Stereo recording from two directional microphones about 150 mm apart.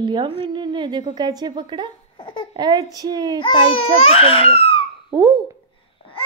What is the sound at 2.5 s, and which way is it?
Speech, 25° right (ahead or behind).